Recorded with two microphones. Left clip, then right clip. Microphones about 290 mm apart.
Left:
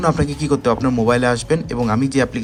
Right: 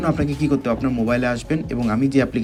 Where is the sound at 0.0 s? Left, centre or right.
Centre.